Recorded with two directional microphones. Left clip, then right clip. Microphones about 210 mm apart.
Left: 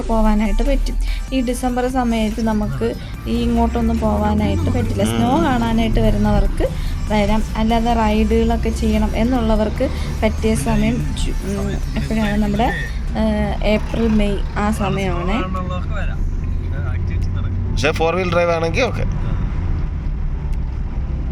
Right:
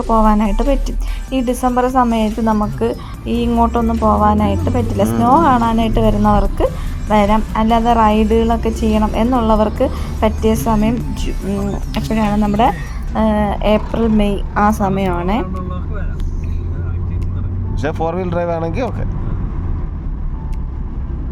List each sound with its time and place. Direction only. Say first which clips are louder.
0.1 s speech: right 6 dB; 5° right (ahead or behind)
11.9 s a woman's voice: right 4 dB; 5° right (ahead or behind)
17.7 s speech: left 2 dB; 20° right (ahead or behind)